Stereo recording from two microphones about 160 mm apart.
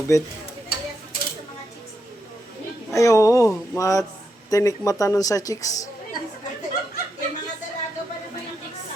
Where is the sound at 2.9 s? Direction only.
20° left (ahead or behind).